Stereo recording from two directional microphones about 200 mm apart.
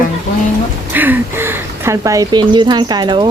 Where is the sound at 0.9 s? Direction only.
10° right (ahead or behind).